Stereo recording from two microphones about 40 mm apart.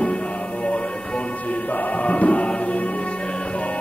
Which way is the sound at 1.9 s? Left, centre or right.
Left.